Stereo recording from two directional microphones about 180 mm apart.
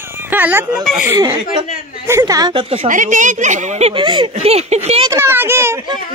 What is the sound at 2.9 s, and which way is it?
A woman's voice, 45° right (ahead or behind).